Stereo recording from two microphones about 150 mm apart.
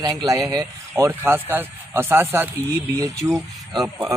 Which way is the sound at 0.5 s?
15° right (ahead or behind).